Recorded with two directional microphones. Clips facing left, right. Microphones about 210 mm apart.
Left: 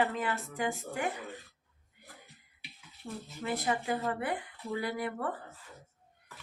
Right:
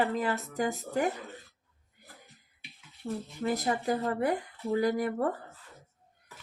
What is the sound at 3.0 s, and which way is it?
Speech, 40° right (ahead or behind).